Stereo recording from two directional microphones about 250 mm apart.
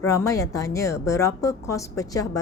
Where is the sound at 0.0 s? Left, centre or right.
Centre.